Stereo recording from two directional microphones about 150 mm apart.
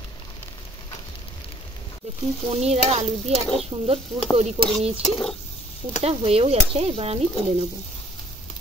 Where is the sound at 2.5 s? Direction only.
45° right (ahead or behind).